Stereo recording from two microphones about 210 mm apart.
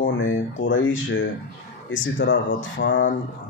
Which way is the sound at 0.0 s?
65° left (ahead or behind).